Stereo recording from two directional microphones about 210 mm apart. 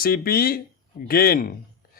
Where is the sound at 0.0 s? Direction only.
45° left (ahead or behind).